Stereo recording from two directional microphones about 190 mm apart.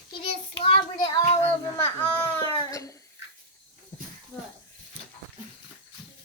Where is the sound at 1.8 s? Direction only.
10° left (ahead or behind).